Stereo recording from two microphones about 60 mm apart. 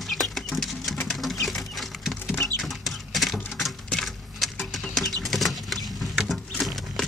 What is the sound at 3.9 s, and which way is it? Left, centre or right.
Keys jangling, centre.